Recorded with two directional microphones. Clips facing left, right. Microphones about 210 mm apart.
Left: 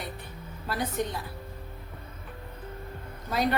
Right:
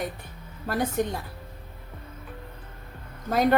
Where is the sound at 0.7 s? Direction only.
50° right (ahead or behind).